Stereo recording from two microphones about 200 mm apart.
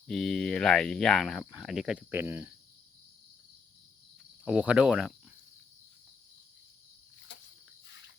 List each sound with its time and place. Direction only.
0.1 s speech: centre (ahead or behind)
4.4 s speech: 5° right (ahead or behind)
7.3 s insect: 65° left (ahead or behind)